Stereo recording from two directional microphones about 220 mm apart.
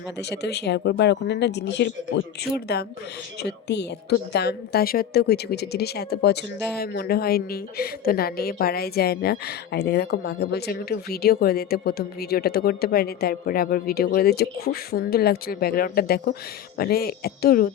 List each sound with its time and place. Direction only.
0.2 s a woman's voice: 50° left (ahead or behind)